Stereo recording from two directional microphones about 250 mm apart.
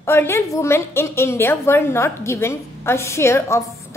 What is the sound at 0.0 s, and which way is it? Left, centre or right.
A woman's voice, centre.